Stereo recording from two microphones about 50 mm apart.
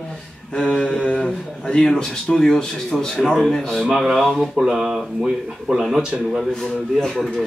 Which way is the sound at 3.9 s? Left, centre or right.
Centre.